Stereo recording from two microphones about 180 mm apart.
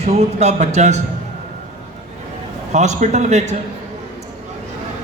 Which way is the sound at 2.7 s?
40° right (ahead or behind).